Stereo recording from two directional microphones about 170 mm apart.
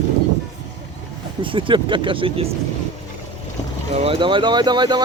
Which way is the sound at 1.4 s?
30° right (ahead or behind).